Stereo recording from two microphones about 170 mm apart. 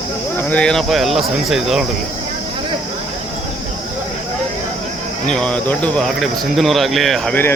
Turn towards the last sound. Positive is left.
turn(degrees=10)  # may be behind; listen again after turning